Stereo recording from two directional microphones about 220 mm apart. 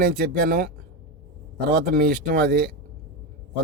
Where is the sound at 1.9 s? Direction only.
45° right (ahead or behind).